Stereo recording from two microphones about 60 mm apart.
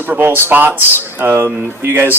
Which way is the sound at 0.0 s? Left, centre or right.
Right.